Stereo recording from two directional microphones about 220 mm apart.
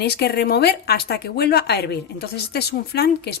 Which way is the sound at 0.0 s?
45° left (ahead or behind).